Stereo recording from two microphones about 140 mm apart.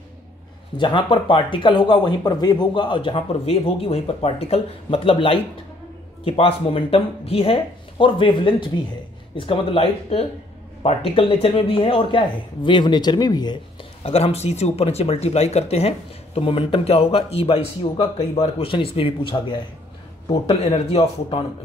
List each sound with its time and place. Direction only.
0.7 s speech: 35° left (ahead or behind)
14.0 s speech: 45° left (ahead or behind)